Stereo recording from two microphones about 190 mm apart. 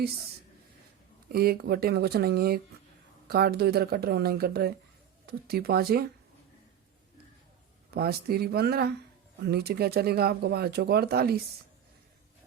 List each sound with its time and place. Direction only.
1.3 s speech: 55° right (ahead or behind)
7.9 s speech: 55° right (ahead or behind)